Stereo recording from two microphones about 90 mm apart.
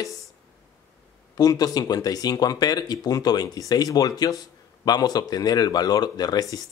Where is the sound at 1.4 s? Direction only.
45° left (ahead or behind).